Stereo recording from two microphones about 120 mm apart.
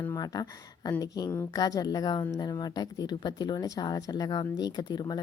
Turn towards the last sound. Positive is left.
turn(degrees=35)  # may be behind; listen again after turning